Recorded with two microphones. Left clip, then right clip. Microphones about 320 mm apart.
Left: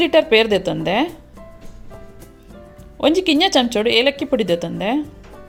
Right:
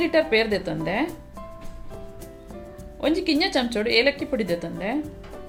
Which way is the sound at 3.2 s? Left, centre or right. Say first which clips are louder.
Left 7 dB; left.